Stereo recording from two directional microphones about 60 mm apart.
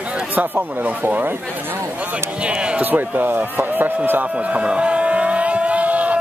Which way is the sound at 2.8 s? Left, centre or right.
Right.